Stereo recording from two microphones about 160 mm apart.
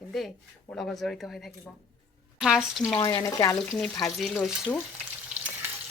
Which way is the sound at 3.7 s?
5° left (ahead or behind).